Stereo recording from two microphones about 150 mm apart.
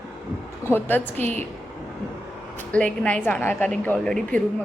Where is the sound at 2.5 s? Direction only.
10° left (ahead or behind).